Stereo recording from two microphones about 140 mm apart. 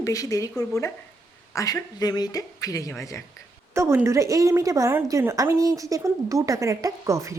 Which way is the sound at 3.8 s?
20° right (ahead or behind).